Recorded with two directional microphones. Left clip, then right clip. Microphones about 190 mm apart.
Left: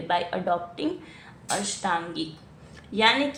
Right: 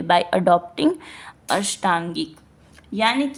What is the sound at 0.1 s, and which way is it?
A woman's voice, 45° right (ahead or behind).